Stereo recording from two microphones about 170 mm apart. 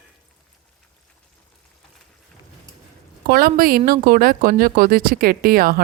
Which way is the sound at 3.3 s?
60° right (ahead or behind).